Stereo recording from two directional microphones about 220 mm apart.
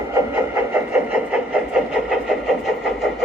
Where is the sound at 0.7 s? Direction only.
5° right (ahead or behind).